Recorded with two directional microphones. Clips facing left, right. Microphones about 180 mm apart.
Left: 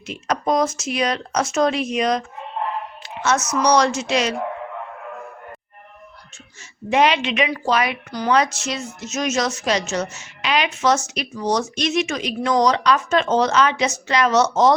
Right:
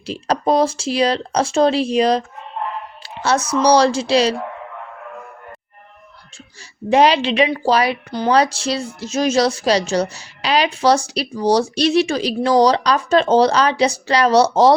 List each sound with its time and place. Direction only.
0.0 s a woman's voice: 30° right (ahead or behind)
6.9 s a woman's voice: 35° right (ahead or behind)